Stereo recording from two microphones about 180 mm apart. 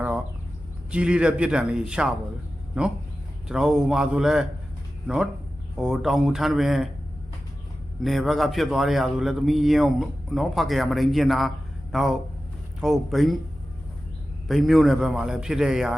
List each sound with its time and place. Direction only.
0.9 s speech: 5° right (ahead or behind)
3.5 s speech: 5° right (ahead or behind)
8.0 s speech: centre (ahead or behind)
14.4 s speech: centre (ahead or behind)